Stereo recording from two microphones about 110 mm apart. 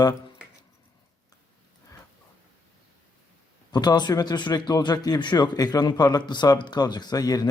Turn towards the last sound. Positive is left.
turn(degrees=35)  # may be behind; listen again after turning